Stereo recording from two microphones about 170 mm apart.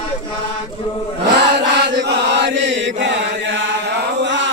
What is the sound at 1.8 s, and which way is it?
Chant, 90° right.